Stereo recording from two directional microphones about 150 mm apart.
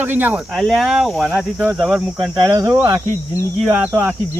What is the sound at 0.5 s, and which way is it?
Speech, centre (ahead or behind).